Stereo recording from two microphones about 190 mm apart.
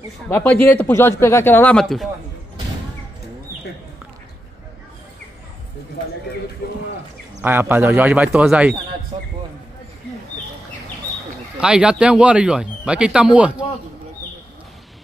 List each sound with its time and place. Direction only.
0.3 s speech: 10° left (ahead or behind)
7.4 s speech: 10° right (ahead or behind)
9.1 s basketball bounce: 30° right (ahead or behind)
11.6 s speech: 5° right (ahead or behind)